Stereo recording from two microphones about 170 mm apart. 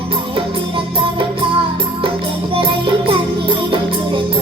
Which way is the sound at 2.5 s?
30° right (ahead or behind).